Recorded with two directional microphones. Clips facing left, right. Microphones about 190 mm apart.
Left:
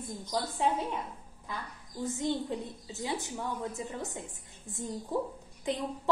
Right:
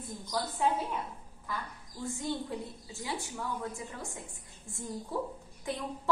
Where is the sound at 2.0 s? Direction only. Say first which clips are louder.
Left 3 dB; 20° left (ahead or behind).